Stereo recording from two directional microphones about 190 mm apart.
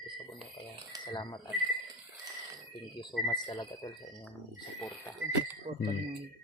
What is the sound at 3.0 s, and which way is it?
Speech, 20° left (ahead or behind).